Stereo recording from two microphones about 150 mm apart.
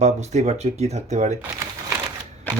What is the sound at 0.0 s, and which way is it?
Speech, 50° right (ahead or behind).